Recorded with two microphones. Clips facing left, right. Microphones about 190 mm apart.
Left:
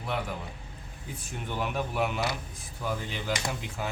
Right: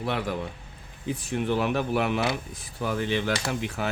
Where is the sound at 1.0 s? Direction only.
85° right.